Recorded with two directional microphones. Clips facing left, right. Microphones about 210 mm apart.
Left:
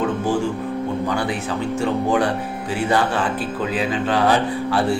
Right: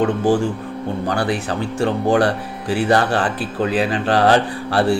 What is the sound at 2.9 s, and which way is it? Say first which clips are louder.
Speech: right 2 dB; 75° right (ahead or behind).